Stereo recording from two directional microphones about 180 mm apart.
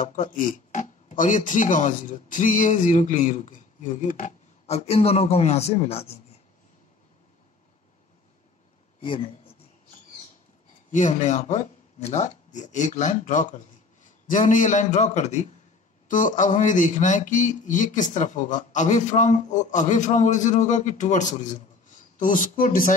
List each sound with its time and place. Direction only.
0.0 s speech: 45° left (ahead or behind)
9.0 s speech: 30° left (ahead or behind)
10.9 s a man's voice: 45° left (ahead or behind)